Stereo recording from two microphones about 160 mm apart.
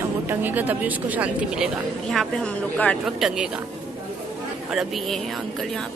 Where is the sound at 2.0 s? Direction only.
5° left (ahead or behind).